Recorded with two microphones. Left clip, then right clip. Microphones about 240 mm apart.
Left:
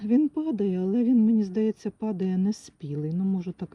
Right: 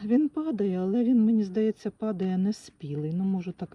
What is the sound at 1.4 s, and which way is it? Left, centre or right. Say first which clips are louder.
Speech: even; centre.